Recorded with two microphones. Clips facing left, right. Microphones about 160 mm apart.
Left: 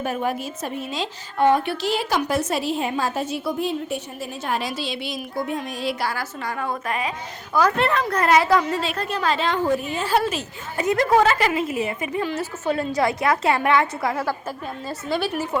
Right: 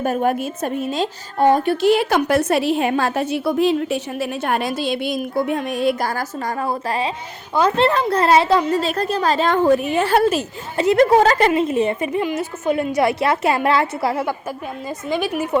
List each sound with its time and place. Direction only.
0.0 s a woman's voice: 45° right (ahead or behind); by 8.8 s 30° right (ahead or behind)
8.8 s speech: 40° right (ahead or behind)
9.6 s a woman's voice: 65° right (ahead or behind)
10.8 s a woman's voice: 25° right (ahead or behind)
12.2 s a woman's voice: 15° right (ahead or behind)
14.8 s speech: 15° right (ahead or behind)